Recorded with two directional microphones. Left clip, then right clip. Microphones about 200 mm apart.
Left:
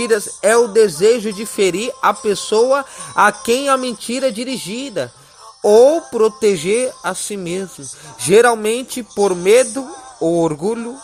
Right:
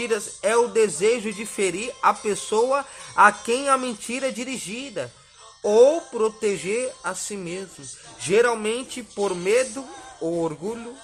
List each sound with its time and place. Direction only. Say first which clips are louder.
0.0 s speech: left 9 dB; 30° left (ahead or behind)